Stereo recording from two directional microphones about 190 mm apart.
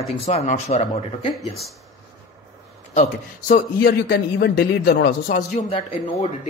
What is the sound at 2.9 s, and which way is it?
A man's voice, 45° left (ahead or behind).